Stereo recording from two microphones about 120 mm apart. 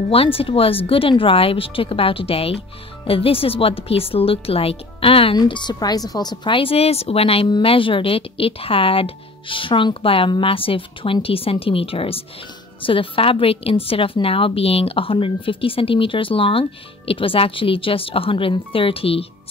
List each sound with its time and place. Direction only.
0.1 s a woman's voice: 50° left (ahead or behind)
5.4 s a woman's voice: 40° left (ahead or behind)